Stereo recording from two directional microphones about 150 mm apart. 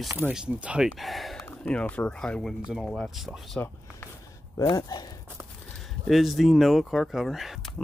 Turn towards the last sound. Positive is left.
turn(degrees=0)  # may be behind; listen again after turning